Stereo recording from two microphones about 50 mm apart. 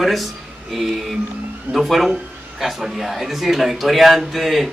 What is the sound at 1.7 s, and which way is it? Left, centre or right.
A man's voice, centre.